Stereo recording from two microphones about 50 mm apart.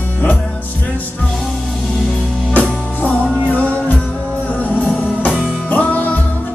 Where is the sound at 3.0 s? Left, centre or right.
Left.